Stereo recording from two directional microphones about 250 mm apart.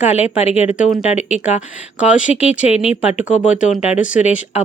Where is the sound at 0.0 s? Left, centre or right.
Left.